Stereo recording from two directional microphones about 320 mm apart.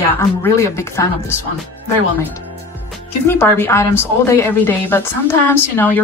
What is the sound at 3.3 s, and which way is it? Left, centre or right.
A woman's voice, centre.